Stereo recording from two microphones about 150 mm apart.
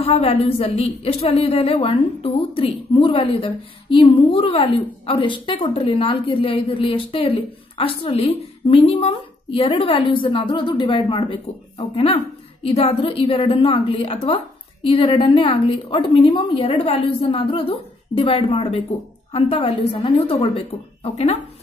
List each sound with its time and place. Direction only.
0.0 s a woman's voice: 40° left (ahead or behind)